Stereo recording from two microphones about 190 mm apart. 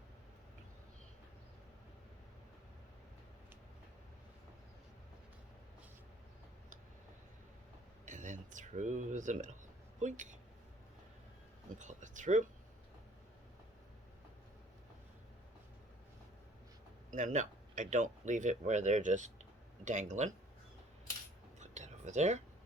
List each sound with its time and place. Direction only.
8.0 s a sound: 40° right (ahead or behind)
10.0 s speech: 40° right (ahead or behind)
11.8 s speech: 40° right (ahead or behind)
17.1 s speech: 40° right (ahead or behind)
21.6 s whispering: 35° right (ahead or behind)